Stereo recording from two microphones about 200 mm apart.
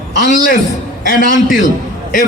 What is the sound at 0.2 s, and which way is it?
A man's voice, 45° left (ahead or behind).